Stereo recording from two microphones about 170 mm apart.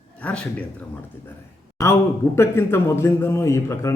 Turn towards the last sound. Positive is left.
turn(degrees=15)  # may be behind; listen again after turning